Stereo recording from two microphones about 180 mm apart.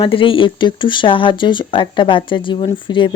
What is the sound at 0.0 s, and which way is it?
Speech, 30° left (ahead or behind).